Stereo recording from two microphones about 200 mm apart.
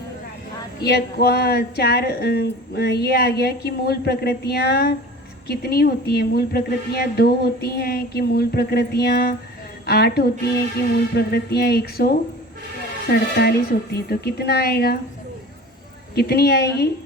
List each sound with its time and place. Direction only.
0.9 s speech: 55° left (ahead or behind)
13.4 s speech: 55° left (ahead or behind)
16.1 s speech: 50° left (ahead or behind)